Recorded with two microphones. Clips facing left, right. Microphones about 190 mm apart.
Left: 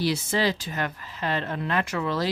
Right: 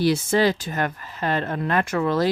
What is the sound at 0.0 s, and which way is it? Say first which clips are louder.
Speech: right 5 dB; 50° right (ahead or behind).